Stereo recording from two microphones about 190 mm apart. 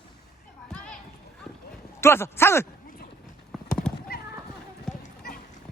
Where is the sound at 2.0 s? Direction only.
15° left (ahead or behind).